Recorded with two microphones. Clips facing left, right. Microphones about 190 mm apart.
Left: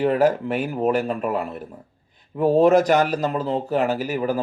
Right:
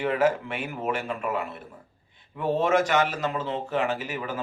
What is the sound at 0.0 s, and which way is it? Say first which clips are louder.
A man's voice: left 5 dB; 35° left (ahead or behind).